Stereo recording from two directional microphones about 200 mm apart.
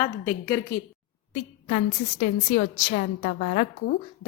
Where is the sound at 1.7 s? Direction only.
40° left (ahead or behind).